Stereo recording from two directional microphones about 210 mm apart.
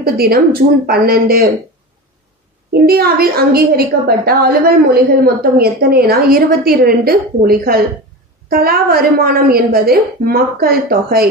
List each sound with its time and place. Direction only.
0.0 s a woman's voice: 45° right (ahead or behind)
2.9 s a woman's voice: 45° right (ahead or behind)